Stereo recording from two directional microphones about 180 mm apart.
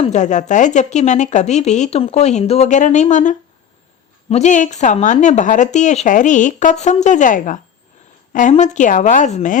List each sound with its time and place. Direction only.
0.0 s speech: 40° left (ahead or behind)